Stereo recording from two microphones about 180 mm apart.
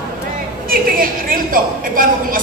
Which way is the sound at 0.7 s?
50° right (ahead or behind).